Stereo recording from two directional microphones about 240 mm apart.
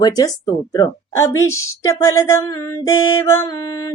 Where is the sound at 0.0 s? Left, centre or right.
Centre.